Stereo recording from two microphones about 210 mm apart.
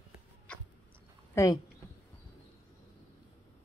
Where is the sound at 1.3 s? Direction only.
15° left (ahead or behind).